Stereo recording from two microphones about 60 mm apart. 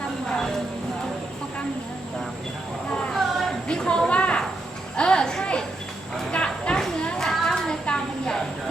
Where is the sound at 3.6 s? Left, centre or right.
Centre.